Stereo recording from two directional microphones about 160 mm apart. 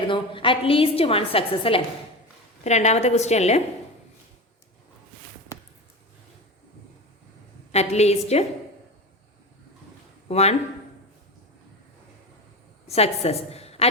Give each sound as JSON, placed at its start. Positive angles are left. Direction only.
{"t": 0.1, "sound": "a woman's voice", "side_deg": 30}
{"t": 7.7, "sound": "a woman's voice", "side_deg": 40}
{"t": 10.2, "sound": "a man's voice", "side_deg": 40}
{"t": 12.9, "sound": "a woman's voice", "side_deg": 40}